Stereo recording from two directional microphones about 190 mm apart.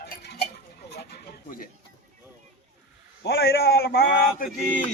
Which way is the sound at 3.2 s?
60° left (ahead or behind).